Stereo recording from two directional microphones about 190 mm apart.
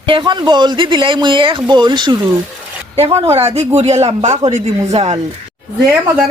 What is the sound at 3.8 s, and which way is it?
Speech, 35° right (ahead or behind).